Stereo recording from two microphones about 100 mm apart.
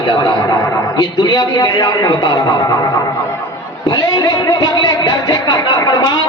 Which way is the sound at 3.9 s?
45° left (ahead or behind).